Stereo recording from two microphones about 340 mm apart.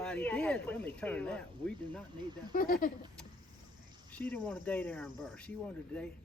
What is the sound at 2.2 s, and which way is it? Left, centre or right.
Speech, centre.